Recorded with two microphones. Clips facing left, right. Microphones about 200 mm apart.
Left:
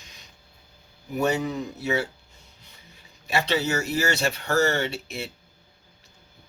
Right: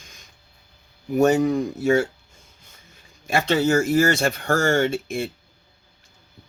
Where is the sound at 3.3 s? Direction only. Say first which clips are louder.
Right 5 dB; 50° right (ahead or behind).